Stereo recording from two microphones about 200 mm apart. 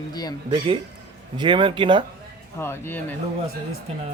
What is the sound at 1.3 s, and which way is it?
Speech, 25° right (ahead or behind).